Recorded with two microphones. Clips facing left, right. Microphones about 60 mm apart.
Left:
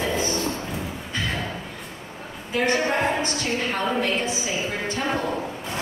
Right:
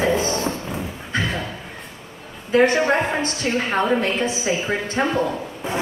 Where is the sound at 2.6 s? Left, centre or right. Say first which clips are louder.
Right 2 dB; right.